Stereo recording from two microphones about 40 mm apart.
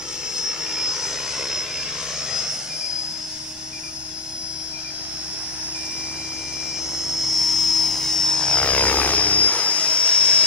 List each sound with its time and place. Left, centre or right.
0.4 s vehicle: centre
7.0 s aircraft: centre
8.6 s vehicle: left